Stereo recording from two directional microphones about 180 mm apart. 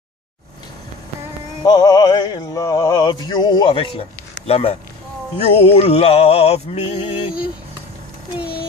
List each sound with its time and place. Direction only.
1.6 s music: 20° left (ahead or behind)